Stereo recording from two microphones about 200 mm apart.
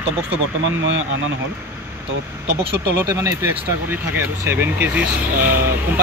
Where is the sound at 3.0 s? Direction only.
15° right (ahead or behind).